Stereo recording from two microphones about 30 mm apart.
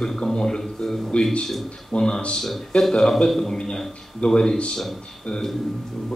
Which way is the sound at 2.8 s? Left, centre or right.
Centre.